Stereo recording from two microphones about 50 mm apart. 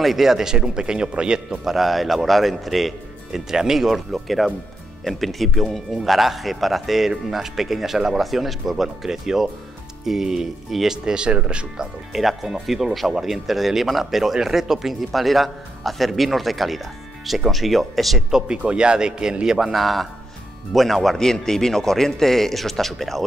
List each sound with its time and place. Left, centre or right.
0.0 s speech: centre
1.6 s speech: centre
3.3 s speech: centre
12.2 s speech: centre
18.6 s speech: centre